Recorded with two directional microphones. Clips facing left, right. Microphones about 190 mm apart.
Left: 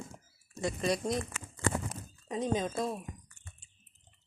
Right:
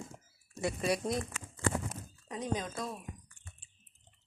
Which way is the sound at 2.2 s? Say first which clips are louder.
Left 5 dB; 20° left (ahead or behind).